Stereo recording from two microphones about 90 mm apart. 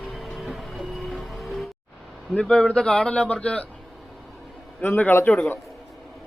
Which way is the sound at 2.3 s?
10° left (ahead or behind).